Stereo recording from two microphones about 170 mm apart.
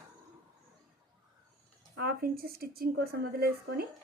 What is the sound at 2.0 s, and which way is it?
A woman's voice, 65° right (ahead or behind).